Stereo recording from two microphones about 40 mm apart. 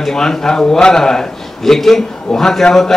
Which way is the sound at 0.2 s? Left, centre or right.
Centre.